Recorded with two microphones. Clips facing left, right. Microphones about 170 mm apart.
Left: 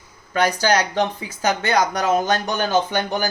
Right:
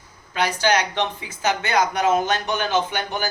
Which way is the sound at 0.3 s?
40° left (ahead or behind).